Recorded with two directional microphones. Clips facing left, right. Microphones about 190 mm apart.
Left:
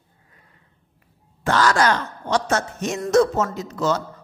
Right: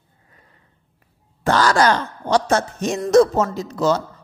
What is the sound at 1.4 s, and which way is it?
A man's voice, 35° right (ahead or behind).